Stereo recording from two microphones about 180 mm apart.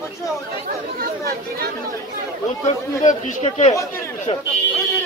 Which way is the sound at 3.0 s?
45° left (ahead or behind).